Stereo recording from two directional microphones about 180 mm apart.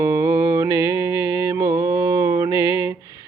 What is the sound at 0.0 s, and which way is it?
Mantra, 15° right (ahead or behind).